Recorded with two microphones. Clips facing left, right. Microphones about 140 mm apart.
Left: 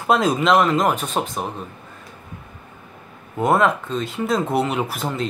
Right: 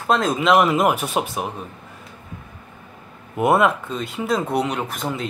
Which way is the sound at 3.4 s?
5° right (ahead or behind).